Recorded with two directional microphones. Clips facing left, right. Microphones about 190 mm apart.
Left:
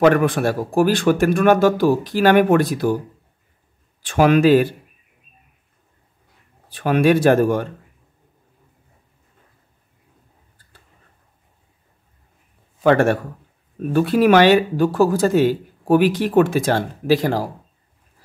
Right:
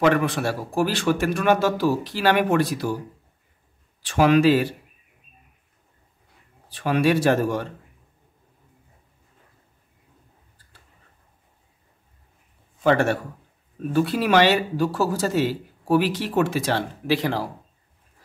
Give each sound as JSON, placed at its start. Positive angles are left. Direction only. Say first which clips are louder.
{"t": 0.0, "sound": "speech", "louder": "left 5 dB", "side_deg": 50}
{"t": 4.0, "sound": "speech", "louder": "left 3 dB", "side_deg": 50}
{"t": 6.7, "sound": "speech", "louder": "left 5 dB", "side_deg": 55}
{"t": 12.8, "sound": "speech", "louder": "left 4 dB", "side_deg": 55}